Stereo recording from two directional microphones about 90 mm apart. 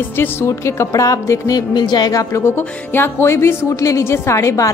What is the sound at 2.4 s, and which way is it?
A woman's voice, 25° left (ahead or behind).